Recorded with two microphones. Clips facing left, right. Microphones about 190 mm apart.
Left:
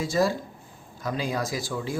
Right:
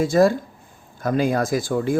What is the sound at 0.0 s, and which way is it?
Speech, 55° right (ahead or behind).